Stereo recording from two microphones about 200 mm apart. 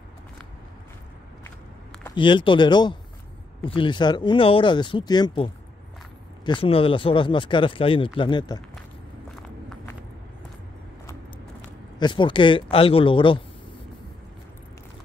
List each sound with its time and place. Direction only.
2.1 s speech: 25° left (ahead or behind)
12.0 s speech: 25° left (ahead or behind)